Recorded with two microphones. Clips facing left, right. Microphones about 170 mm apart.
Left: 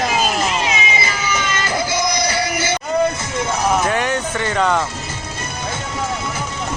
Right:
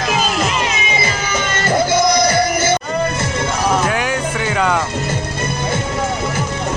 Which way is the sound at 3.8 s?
Centre (ahead or behind).